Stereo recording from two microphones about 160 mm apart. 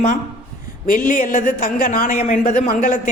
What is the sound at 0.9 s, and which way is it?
A woman's voice, 60° left (ahead or behind).